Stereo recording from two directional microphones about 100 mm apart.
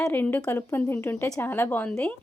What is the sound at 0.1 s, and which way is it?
A woman's voice, 20° left (ahead or behind).